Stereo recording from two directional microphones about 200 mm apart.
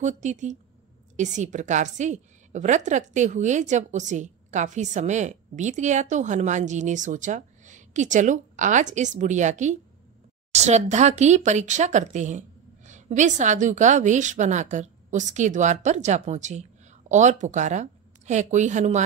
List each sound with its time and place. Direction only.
0.0 s a woman's voice: 35° right (ahead or behind)